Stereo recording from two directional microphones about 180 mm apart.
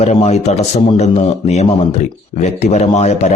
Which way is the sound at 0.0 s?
35° left (ahead or behind).